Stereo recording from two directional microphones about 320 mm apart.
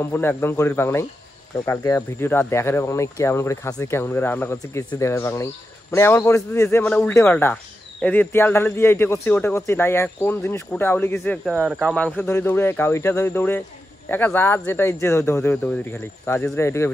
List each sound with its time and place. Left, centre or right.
0.0 s speech: centre